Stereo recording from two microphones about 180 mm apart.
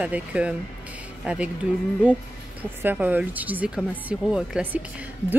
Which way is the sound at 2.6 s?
10° right (ahead or behind).